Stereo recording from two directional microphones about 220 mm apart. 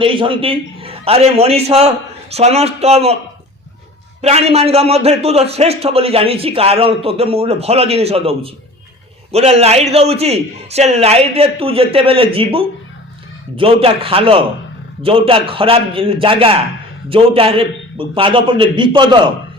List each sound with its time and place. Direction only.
0.0 s a man's voice: 25° right (ahead or behind)
4.2 s a man's voice: 30° right (ahead or behind)